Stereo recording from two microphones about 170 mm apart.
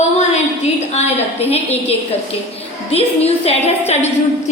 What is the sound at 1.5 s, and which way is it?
A woman's voice, 40° left (ahead or behind).